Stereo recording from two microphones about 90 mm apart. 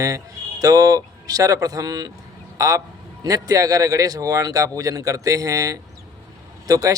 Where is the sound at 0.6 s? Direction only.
45° right (ahead or behind).